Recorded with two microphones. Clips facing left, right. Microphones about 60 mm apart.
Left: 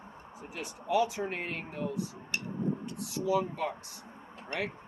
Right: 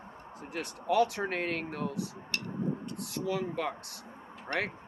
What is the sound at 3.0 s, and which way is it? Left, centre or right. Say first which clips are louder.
Speech: left 4 dB; right.